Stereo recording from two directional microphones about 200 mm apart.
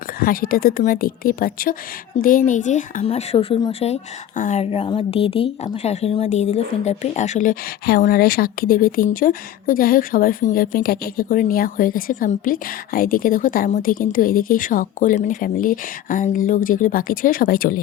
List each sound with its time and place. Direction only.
0.2 s speech: 45° left (ahead or behind)
2.1 s speech: 30° left (ahead or behind)